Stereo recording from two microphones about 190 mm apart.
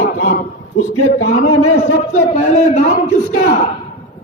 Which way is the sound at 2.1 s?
40° left (ahead or behind).